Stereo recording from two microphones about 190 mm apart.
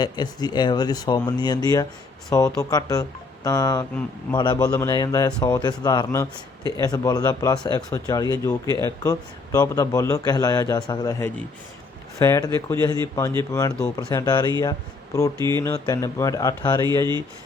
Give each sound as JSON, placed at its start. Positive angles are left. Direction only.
{"t": 0.0, "sound": "a man's voice", "side_deg": 20}
{"t": 15.4, "sound": "speech", "side_deg": -20}
{"t": 15.6, "sound": "speech", "side_deg": 15}